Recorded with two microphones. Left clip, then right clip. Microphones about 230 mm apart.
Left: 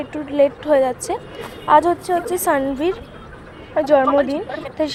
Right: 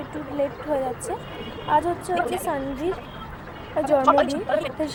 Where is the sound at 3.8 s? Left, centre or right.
Centre.